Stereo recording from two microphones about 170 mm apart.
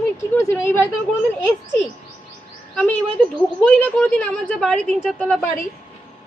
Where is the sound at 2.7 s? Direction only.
5° left (ahead or behind).